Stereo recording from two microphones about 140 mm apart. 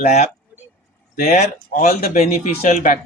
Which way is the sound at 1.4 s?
55° left (ahead or behind).